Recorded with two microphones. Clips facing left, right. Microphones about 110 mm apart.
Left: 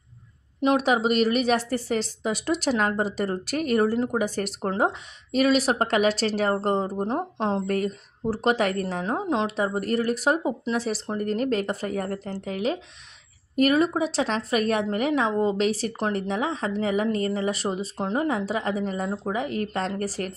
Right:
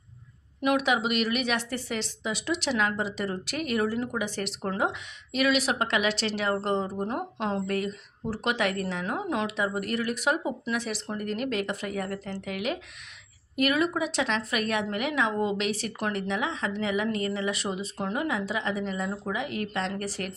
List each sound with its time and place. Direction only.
0.6 s a woman's voice: 35° left (ahead or behind)
7.7 s a woman's voice: 40° left (ahead or behind)